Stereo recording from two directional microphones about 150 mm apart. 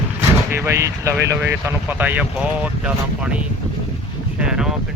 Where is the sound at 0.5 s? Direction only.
15° right (ahead or behind).